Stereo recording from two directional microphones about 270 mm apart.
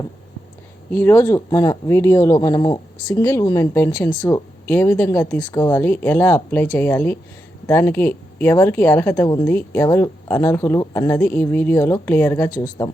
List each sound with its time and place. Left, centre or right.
0.9 s a woman's voice: centre